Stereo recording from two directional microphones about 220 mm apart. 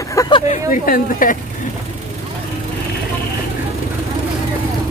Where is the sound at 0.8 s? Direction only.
40° left (ahead or behind).